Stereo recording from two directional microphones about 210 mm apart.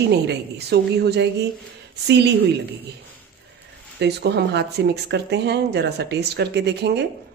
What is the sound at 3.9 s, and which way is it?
Speech, 50° right (ahead or behind).